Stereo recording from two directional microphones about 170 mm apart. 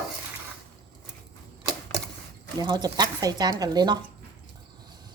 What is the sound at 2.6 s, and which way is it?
Speech, 25° right (ahead or behind).